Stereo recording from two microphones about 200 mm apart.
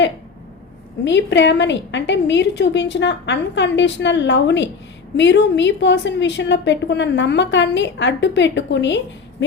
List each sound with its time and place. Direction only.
1.0 s a woman's voice: 65° left (ahead or behind)